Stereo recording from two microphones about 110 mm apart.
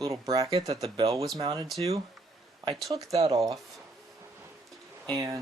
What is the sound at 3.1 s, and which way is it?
Speech, 70° right (ahead or behind).